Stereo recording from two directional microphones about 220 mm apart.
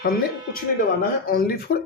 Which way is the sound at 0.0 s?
45° left (ahead or behind).